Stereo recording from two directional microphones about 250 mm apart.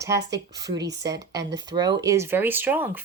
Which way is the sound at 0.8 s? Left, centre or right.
Right.